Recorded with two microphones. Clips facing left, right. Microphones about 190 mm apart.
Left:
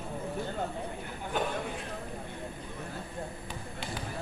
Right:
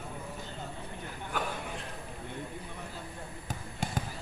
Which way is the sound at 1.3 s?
20° left (ahead or behind).